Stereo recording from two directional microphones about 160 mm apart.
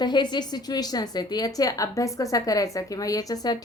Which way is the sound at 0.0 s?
25° left (ahead or behind).